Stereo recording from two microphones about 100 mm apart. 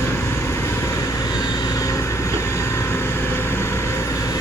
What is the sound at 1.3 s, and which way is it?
Vehicle, 40° left (ahead or behind).